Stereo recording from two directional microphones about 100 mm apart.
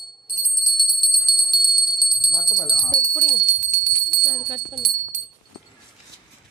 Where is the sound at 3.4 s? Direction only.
90° right.